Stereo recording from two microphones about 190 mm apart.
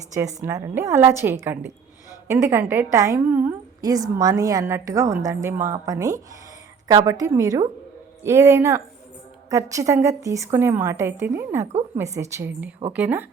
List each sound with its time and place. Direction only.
0.1 s a woman's voice: 15° right (ahead or behind)